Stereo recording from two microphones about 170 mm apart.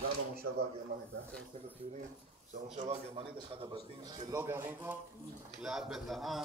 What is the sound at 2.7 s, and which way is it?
Speech, 40° right (ahead or behind).